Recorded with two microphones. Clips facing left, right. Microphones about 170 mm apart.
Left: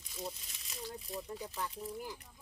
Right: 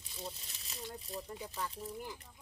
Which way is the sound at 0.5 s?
30° right (ahead or behind).